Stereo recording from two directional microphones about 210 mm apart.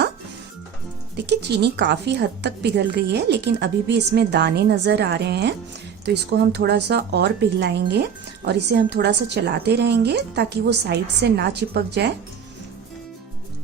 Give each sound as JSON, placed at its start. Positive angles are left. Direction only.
{"t": 1.1, "sound": "a woman's voice", "side_deg": -55}